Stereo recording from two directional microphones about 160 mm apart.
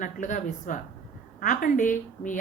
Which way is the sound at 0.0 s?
55° left (ahead or behind).